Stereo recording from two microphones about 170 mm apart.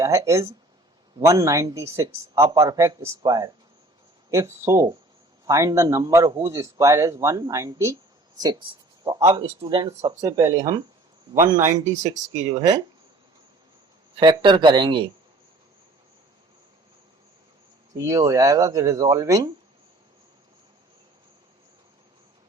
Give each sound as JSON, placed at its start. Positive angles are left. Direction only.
{"t": 0.0, "sound": "speech", "side_deg": -20}
{"t": 14.2, "sound": "speech", "side_deg": -30}
{"t": 17.9, "sound": "speech", "side_deg": -20}